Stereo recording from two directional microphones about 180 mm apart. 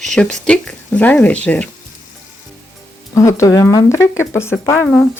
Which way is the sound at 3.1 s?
15° left (ahead or behind).